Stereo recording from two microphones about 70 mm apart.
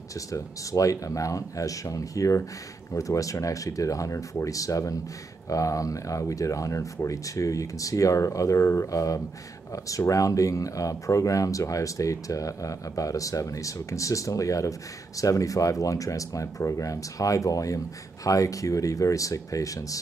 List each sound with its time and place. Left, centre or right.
0.3 s speech: left